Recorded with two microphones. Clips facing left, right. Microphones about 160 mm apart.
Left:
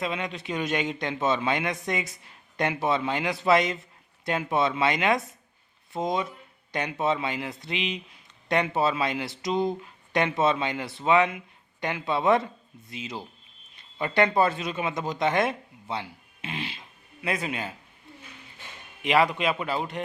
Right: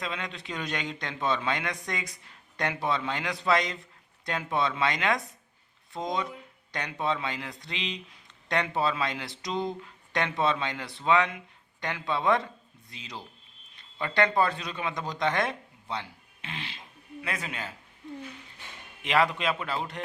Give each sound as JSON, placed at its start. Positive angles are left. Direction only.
{"t": 0.0, "sound": "a man's voice", "side_deg": 10}
{"t": 6.8, "sound": "a man's voice", "side_deg": 20}
{"t": 7.1, "sound": "a man's voice", "side_deg": 10}
{"t": 19.0, "sound": "speech", "side_deg": 5}